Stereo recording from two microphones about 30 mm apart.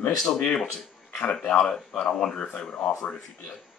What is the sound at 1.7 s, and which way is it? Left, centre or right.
Speech, left.